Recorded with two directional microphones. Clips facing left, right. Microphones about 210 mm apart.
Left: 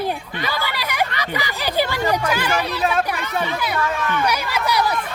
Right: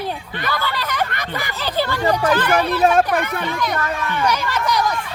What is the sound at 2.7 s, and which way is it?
Speech, 50° right (ahead or behind).